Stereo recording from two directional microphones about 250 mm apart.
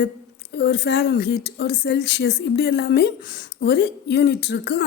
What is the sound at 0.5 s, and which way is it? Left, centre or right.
Speech, left.